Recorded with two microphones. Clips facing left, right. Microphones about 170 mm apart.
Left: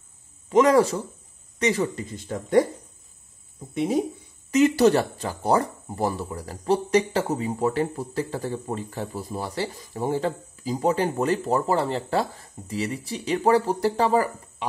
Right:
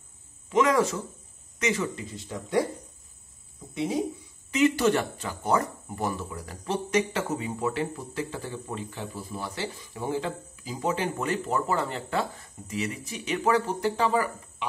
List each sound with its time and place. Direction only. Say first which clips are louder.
0.5 s speech: left 5 dB; 35° left (ahead or behind)
3.7 s speech: left 5 dB; 55° left (ahead or behind)
4.5 s speech: left 5 dB; 40° left (ahead or behind)